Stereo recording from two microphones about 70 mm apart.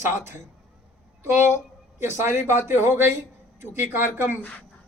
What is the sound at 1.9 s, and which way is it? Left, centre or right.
Speech, right.